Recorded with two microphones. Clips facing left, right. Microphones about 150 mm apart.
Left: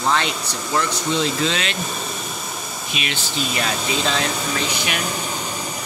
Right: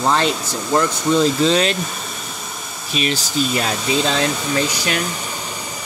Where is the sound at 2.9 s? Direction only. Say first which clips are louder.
Right 7 dB; 35° right (ahead or behind).